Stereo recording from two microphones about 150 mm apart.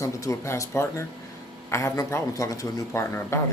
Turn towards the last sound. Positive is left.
turn(degrees=15)  # may be behind; listen again after turning